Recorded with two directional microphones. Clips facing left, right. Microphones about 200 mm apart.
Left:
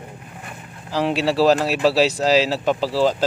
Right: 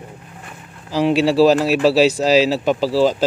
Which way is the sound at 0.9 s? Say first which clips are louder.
Right 4 dB; 5° right (ahead or behind).